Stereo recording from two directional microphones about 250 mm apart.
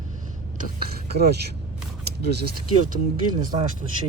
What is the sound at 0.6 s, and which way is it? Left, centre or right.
Speech, right.